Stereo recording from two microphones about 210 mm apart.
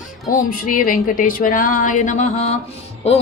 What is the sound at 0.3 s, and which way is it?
Speech, 45° left (ahead or behind).